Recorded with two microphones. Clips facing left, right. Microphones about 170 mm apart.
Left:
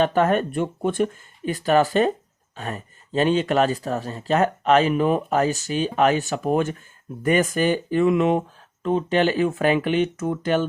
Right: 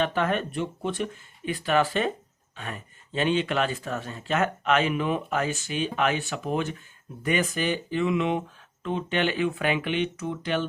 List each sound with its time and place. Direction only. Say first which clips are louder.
0.0 s speech: left 6 dB; 40° left (ahead or behind)